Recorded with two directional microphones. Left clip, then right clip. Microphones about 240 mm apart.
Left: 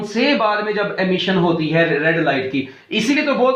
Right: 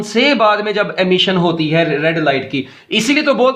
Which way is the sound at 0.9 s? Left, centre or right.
Right.